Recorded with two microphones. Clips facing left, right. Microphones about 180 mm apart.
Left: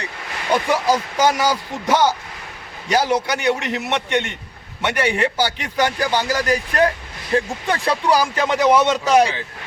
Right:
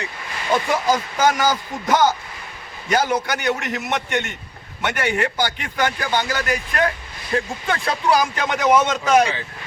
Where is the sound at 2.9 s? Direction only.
30° left (ahead or behind).